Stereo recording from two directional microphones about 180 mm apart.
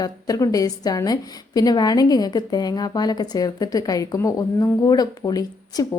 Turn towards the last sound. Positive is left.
turn(degrees=20)  # may be behind; listen again after turning